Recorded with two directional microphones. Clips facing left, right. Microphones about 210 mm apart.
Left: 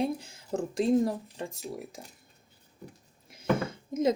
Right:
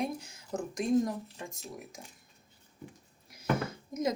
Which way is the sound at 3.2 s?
25° left (ahead or behind).